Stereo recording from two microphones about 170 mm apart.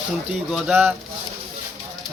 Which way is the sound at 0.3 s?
5° right (ahead or behind).